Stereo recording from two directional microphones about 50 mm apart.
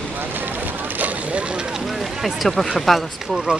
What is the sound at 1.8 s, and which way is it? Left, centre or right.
Run, centre.